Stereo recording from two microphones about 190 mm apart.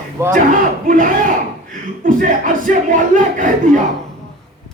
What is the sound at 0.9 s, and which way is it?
Speech, 45° right (ahead or behind).